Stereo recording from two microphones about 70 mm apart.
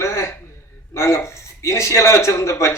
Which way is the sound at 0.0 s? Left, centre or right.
Left.